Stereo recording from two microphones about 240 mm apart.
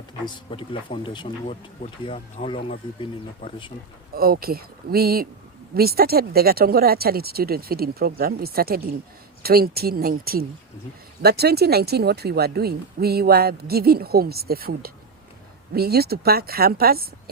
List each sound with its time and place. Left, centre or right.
0.1 s speech: left
4.1 s speech: right